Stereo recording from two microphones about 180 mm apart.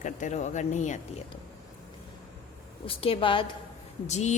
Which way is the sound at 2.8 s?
30° left (ahead or behind).